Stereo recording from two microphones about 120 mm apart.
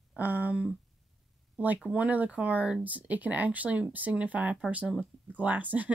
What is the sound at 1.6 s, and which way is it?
Speech, 10° right (ahead or behind).